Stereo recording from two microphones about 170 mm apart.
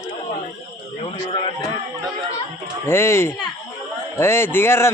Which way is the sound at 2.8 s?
15° left (ahead or behind).